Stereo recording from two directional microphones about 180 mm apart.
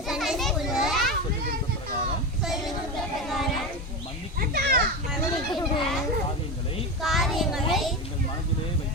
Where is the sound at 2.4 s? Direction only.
Centre (ahead or behind).